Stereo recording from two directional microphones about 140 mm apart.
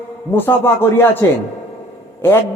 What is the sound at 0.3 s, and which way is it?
Speech, 15° left (ahead or behind).